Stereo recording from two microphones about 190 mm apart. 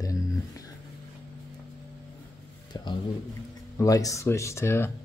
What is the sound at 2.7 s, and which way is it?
Speech, 20° left (ahead or behind).